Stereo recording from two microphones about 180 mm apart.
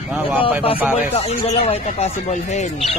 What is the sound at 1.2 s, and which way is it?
Speech, 35° left (ahead or behind).